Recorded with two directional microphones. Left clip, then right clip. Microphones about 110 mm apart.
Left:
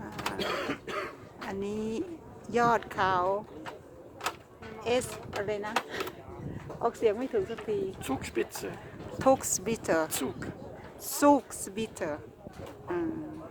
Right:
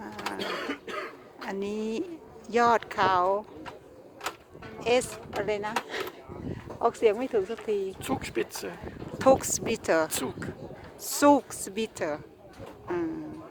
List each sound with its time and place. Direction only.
0.0 s throat clearing: 15° right (ahead or behind)
2.5 s speech: 5° right (ahead or behind)
4.8 s speech: 15° right (ahead or behind)